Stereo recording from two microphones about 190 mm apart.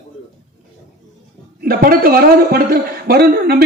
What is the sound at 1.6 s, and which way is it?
A man's voice, 50° right (ahead or behind).